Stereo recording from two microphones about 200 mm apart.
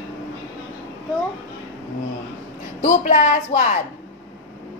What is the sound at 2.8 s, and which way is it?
Speech, 40° left (ahead or behind).